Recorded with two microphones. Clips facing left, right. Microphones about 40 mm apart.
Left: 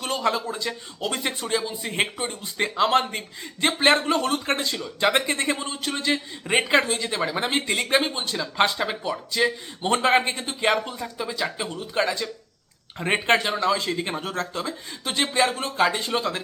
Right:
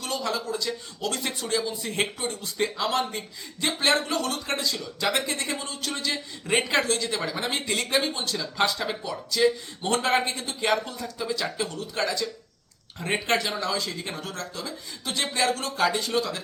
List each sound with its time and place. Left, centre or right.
0.0 s speech: left